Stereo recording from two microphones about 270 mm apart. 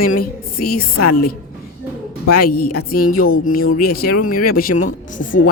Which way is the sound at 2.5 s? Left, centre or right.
Left.